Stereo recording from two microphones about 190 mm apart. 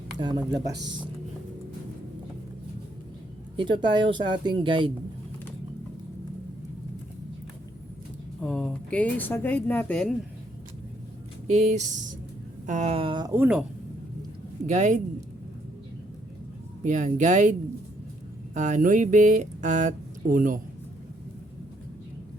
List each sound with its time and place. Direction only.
0.2 s speech: 20° right (ahead or behind)
3.6 s speech: 25° right (ahead or behind)
8.4 s speech: 5° left (ahead or behind)
11.4 s speech: 35° right (ahead or behind)
13.3 s speech: 10° right (ahead or behind)
14.7 s speech: 40° right (ahead or behind)
16.8 s speech: 40° right (ahead or behind)
18.5 s speech: 40° right (ahead or behind)